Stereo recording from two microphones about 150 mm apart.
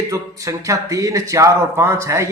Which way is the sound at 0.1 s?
20° right (ahead or behind).